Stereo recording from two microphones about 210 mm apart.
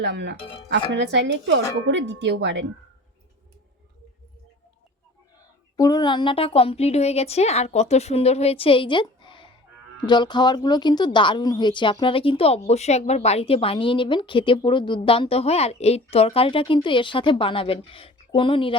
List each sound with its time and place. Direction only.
0.0 s speech: 55° right (ahead or behind)
5.7 s speech: 15° left (ahead or behind)